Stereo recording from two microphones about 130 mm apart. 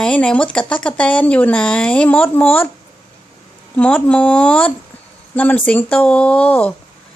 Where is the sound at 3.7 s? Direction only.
10° left (ahead or behind).